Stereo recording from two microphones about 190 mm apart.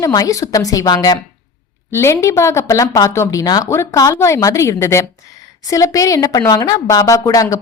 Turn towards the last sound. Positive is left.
turn(degrees=15)  # may be behind; listen again after turning